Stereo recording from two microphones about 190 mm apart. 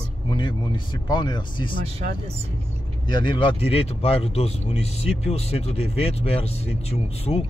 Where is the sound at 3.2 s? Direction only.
25° left (ahead or behind).